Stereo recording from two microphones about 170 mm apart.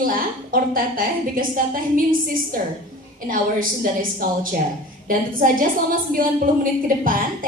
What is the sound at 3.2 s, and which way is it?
A woman's voice, 55° right (ahead or behind).